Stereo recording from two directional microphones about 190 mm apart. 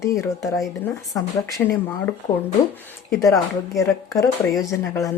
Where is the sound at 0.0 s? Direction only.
15° left (ahead or behind).